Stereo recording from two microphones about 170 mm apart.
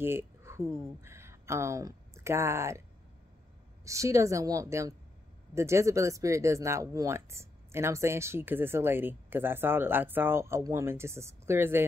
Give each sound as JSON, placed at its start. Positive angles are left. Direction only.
{"t": 0.0, "sound": "speech", "side_deg": -15}
{"t": 3.8, "sound": "a woman's voice", "side_deg": -20}